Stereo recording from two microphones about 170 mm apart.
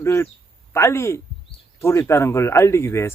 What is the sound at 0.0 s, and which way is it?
Speech, 15° left (ahead or behind).